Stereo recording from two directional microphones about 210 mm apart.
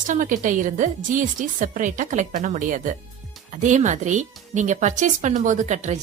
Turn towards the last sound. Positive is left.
turn(degrees=-35)  # may be behind; listen again after turning